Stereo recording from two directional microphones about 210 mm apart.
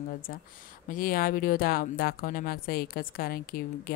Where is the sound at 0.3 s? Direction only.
45° left (ahead or behind).